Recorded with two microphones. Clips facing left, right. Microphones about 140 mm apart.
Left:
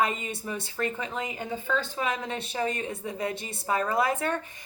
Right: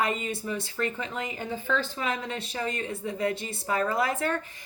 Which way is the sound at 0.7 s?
20° left (ahead or behind).